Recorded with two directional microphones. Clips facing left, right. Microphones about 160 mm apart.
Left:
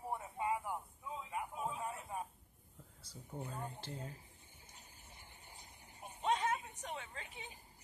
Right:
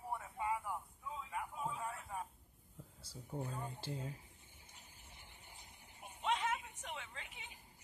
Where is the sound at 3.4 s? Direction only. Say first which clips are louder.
Left 2 dB; 20° left (ahead or behind).